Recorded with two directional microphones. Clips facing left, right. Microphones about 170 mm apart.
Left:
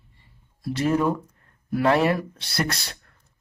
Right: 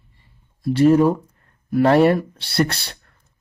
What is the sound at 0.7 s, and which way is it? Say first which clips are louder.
Speech: right 8 dB; 30° right (ahead or behind).